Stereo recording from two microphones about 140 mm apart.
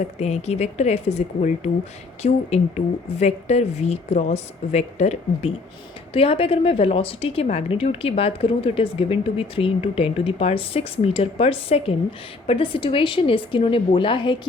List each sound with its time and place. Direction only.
0.0 s a woman's voice: 50° left (ahead or behind)